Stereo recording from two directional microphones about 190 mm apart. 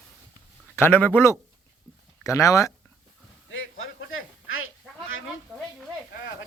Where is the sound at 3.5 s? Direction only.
90° left.